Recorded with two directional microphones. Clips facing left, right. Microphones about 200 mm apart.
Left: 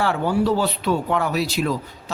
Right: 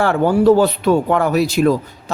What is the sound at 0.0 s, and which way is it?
A man's voice, 50° right (ahead or behind).